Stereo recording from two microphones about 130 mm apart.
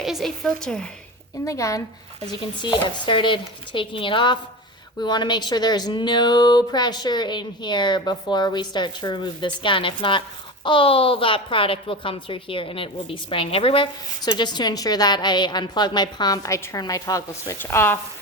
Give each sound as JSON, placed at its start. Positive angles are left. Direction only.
{"t": 0.0, "sound": "a woman's voice", "side_deg": 0}
{"t": 1.5, "sound": "speech", "side_deg": 25}
{"t": 2.6, "sound": "a woman's voice", "side_deg": 35}